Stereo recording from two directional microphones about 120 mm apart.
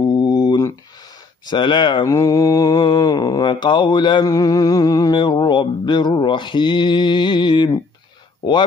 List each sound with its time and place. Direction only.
0.0 s a sound: 35° left (ahead or behind)
1.4 s mantra: 40° left (ahead or behind)
2.0 s mantra: 25° left (ahead or behind)